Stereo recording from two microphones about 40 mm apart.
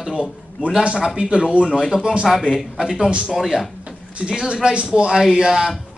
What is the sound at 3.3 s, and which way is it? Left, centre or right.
Speech, centre.